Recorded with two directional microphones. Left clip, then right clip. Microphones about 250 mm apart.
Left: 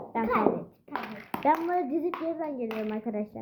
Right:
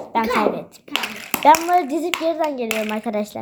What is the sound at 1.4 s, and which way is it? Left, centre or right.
Speech, centre.